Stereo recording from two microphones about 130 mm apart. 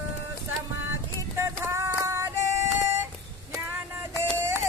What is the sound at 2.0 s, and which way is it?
Female singing, 20° right (ahead or behind).